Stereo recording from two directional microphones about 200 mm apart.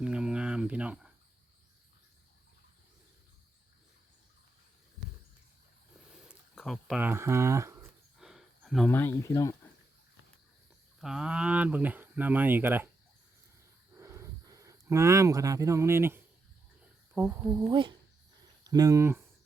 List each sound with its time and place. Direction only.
0.0 s cricket: 5° right (ahead or behind)
6.1 s a sound: centre (ahead or behind)
7.0 s speech: 10° right (ahead or behind)
8.2 s speech: centre (ahead or behind); by 9.6 s 15° left (ahead or behind)
11.0 s speech: 5° right (ahead or behind)
14.0 s a sound: 15° right (ahead or behind)
17.2 s speech: 15° right (ahead or behind)